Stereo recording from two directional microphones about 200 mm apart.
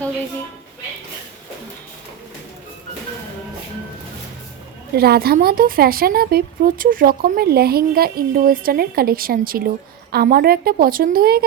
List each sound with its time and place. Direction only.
4.9 s speech: 50° right (ahead or behind)